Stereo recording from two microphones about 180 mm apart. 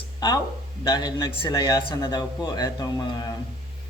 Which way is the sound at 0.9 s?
25° left (ahead or behind).